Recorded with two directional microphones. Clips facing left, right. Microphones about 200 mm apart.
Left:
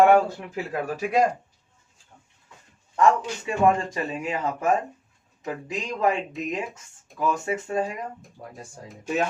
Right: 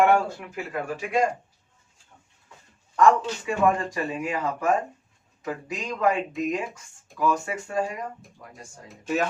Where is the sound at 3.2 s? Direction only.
25° left (ahead or behind).